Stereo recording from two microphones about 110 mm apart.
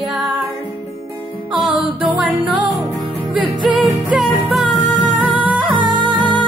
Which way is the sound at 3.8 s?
Centre (ahead or behind).